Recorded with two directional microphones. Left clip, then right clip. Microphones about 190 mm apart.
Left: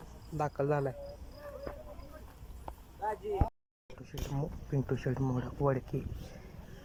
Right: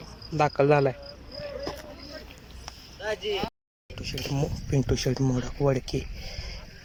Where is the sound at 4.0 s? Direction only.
15° right (ahead or behind).